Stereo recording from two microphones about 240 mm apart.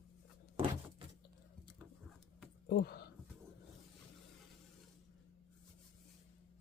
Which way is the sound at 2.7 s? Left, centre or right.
Left.